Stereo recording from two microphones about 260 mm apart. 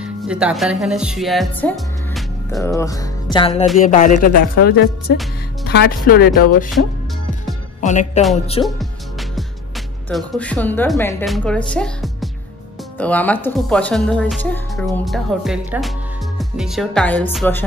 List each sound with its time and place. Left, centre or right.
0.0 s speech: centre; by 6.7 s left
7.8 s speech: left
8.6 s speech: centre
10.0 s a woman's voice: centre